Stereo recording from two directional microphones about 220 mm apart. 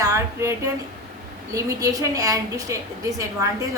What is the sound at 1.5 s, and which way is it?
A woman's voice, 15° right (ahead or behind).